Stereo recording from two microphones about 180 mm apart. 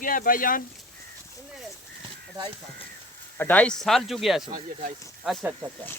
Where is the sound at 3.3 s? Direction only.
10° left (ahead or behind).